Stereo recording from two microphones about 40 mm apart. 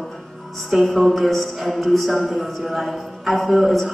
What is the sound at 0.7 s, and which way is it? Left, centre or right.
Music, centre.